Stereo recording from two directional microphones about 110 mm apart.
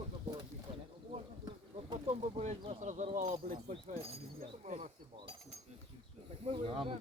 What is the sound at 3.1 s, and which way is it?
Speech, 70° right (ahead or behind).